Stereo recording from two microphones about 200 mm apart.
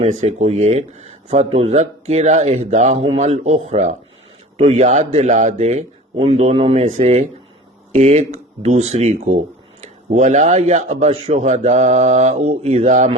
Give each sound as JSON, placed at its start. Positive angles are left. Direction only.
{"t": 0.0, "sound": "speech", "side_deg": -35}